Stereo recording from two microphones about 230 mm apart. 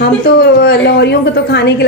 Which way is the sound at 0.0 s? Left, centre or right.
Left.